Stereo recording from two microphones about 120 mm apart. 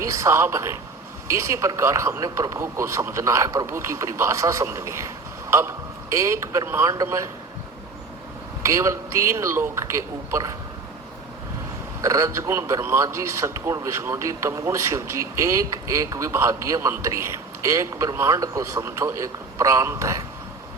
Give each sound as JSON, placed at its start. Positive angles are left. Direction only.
{"t": 0.0, "sound": "a man's voice", "side_deg": -25}
{"t": 8.6, "sound": "a man's voice", "side_deg": -25}
{"t": 12.0, "sound": "a man's voice", "side_deg": -25}